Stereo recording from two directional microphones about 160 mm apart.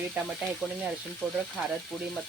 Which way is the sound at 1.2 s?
5° left (ahead or behind).